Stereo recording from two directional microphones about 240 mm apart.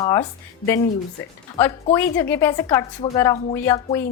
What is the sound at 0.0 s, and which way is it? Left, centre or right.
Speech, centre.